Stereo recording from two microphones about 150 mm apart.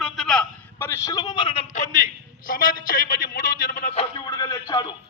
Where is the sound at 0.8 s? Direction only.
20° left (ahead or behind); by 1.6 s 35° left (ahead or behind).